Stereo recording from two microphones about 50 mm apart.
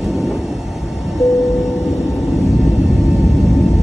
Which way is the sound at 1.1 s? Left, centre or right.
Centre.